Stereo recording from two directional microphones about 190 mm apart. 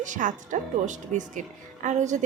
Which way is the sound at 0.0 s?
40° right (ahead or behind).